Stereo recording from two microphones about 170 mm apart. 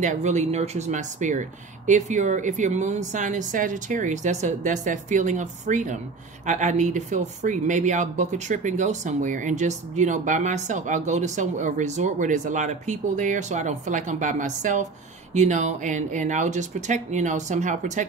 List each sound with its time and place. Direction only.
0.0 s speech: 45° right (ahead or behind)